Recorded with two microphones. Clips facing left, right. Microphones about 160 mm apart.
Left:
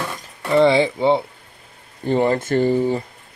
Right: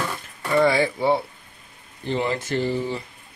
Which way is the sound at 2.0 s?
50° left (ahead or behind).